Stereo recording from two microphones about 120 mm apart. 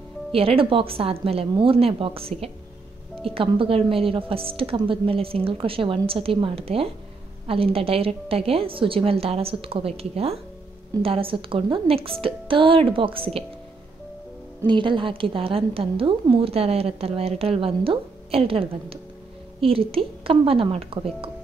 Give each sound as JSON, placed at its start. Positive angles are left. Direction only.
{"t": 0.3, "sound": "a woman's voice", "side_deg": -50}
{"t": 14.7, "sound": "a woman's voice", "side_deg": -45}